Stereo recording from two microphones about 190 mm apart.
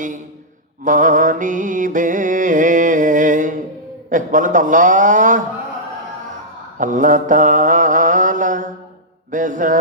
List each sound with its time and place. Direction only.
0.9 s mantra: 45° right (ahead or behind)
4.1 s a man's voice: 45° right (ahead or behind)
6.7 s mantra: 45° right (ahead or behind)
9.3 s a man's voice: 45° right (ahead or behind)